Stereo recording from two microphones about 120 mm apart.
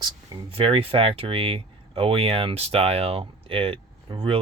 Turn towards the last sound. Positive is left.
turn(degrees=-50)  # may be behind; listen again after turning